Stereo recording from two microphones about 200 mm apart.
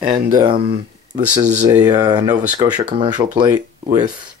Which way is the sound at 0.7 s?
35° right (ahead or behind).